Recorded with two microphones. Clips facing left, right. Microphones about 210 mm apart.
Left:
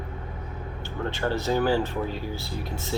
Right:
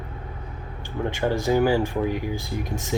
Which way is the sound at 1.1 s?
15° right (ahead or behind).